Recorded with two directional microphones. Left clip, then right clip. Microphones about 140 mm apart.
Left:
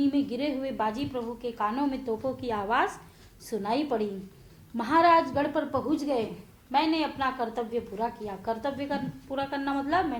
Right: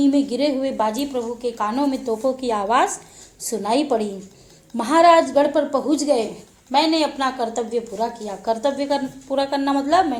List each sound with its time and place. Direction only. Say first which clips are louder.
0.0 s a woman's voice: right 9 dB; 40° right (ahead or behind)